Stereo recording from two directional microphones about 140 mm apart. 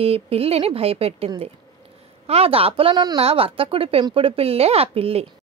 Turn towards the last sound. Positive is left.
turn(degrees=-45)  # may be behind; listen again after turning